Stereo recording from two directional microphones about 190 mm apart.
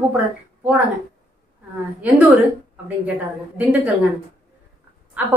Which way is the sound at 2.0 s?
5° right (ahead or behind).